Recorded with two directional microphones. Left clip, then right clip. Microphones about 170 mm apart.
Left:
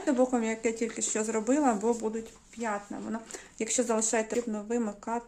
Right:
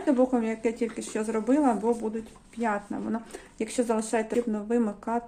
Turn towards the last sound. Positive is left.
turn(degrees=0)  # may be behind; listen again after turning